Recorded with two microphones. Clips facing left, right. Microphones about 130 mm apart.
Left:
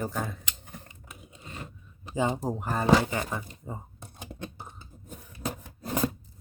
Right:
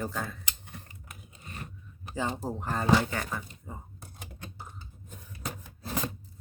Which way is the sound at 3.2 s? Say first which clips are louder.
Left 3 dB; 20° left (ahead or behind).